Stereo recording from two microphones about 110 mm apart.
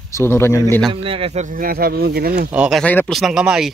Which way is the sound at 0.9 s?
55° right (ahead or behind).